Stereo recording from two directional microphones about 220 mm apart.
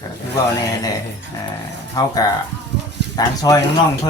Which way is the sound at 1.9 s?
15° left (ahead or behind).